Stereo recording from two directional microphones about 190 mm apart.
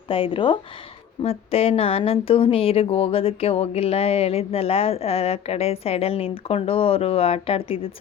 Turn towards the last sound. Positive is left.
turn(degrees=30)  # may be behind; listen again after turning